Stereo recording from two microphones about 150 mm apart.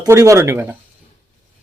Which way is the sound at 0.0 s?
20° right (ahead or behind).